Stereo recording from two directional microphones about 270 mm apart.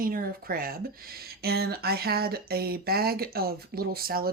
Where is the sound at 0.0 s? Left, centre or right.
Right.